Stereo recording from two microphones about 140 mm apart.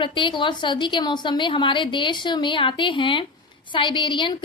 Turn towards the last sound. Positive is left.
turn(degrees=35)  # may be behind; listen again after turning